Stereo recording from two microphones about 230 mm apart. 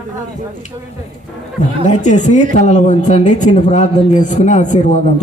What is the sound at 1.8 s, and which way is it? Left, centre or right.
Speech, left.